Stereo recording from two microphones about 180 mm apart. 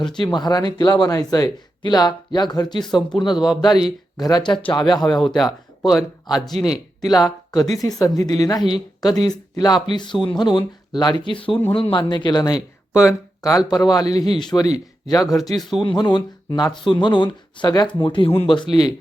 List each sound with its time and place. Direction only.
0.0 s speech: 25° left (ahead or behind)
3.4 s speech: centre (ahead or behind)
3.8 s speech: 20° left (ahead or behind)
5.2 s speech: centre (ahead or behind)
6.5 s speech: 35° right (ahead or behind)
7.2 s speech: 20° left (ahead or behind)